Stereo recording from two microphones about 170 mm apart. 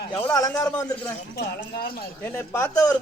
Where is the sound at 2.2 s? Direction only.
15° left (ahead or behind).